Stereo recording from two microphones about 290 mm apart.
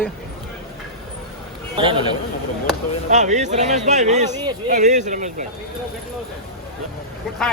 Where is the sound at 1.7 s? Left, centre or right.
Centre.